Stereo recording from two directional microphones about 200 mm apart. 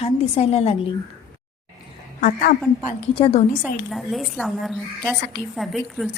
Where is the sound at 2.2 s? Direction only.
40° left (ahead or behind).